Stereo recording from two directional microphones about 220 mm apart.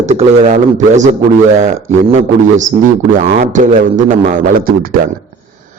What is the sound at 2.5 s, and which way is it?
A man's voice, 35° right (ahead or behind).